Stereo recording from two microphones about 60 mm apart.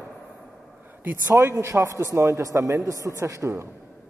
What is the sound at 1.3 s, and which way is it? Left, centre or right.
A man's voice, right.